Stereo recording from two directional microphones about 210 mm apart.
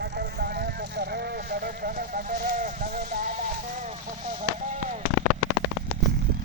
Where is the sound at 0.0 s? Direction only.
50° right (ahead or behind).